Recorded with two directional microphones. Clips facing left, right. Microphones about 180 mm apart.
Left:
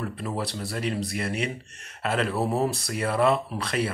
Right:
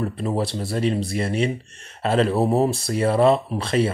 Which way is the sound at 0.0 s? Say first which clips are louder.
Right 7 dB; 25° right (ahead or behind).